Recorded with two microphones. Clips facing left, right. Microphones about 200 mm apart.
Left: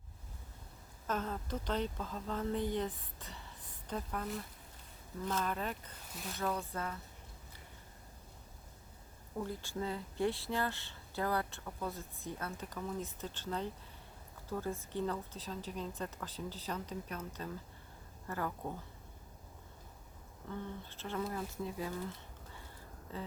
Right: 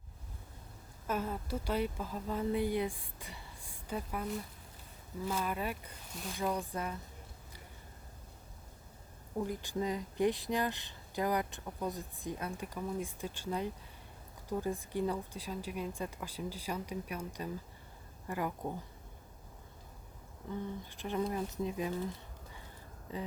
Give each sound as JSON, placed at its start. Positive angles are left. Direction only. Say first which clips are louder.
{"t": 1.0, "sound": "speech", "louder": "right 2 dB", "side_deg": -10}
{"t": 9.4, "sound": "speech", "louder": "right 4 dB", "side_deg": -15}
{"t": 20.4, "sound": "speech", "louder": "right 3 dB", "side_deg": -15}
{"t": 23.1, "sound": "speech", "louder": "right 3 dB", "side_deg": -15}